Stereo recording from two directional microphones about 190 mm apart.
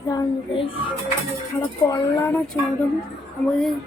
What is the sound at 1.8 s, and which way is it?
Speech, 15° left (ahead or behind).